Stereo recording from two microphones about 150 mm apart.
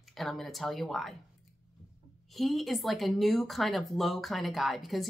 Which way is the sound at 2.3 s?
Centre (ahead or behind).